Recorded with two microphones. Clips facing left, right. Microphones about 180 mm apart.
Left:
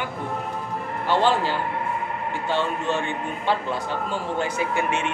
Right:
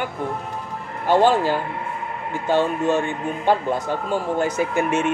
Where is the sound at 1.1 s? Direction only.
45° right (ahead or behind).